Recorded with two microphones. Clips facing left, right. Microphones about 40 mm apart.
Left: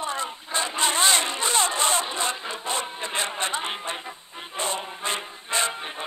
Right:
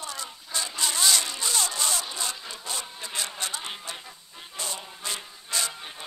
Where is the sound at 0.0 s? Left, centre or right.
Left.